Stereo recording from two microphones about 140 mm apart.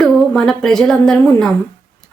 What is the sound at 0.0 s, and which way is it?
A woman's voice, 5° left (ahead or behind).